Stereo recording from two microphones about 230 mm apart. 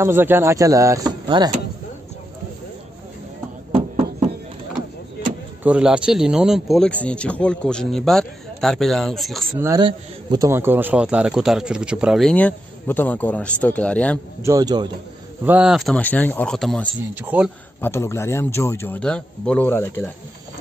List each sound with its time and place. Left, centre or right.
0.0 s speech: centre
3.7 s a sound: right
5.6 s a man's voice: centre
9.6 s a man's voice: centre
14.4 s speech: centre
15.4 s a man's voice: centre
17.7 s a man's voice: centre